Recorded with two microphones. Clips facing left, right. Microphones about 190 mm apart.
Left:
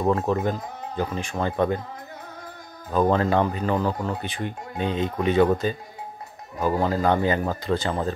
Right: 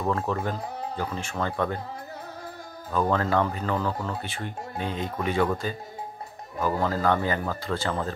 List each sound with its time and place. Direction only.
0.0 s speech: 25° left (ahead or behind)
2.9 s speech: 20° left (ahead or behind)
6.6 s speech: 20° left (ahead or behind)